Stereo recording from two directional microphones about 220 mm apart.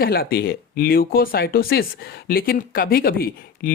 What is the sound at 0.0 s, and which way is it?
Speech, 45° left (ahead or behind).